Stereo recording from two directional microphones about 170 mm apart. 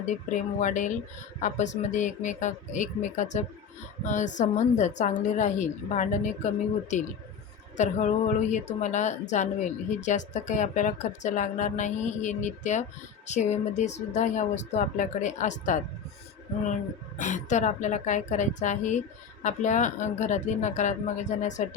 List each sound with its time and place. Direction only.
0.0 s a woman's voice: 45° left (ahead or behind)
7.8 s a woman's voice: 45° left (ahead or behind)
17.2 s a woman's voice: 45° left (ahead or behind)